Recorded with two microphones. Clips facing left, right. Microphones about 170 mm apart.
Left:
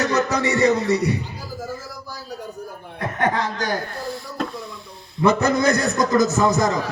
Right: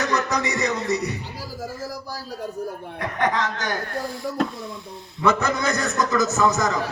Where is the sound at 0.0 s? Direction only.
30° left (ahead or behind).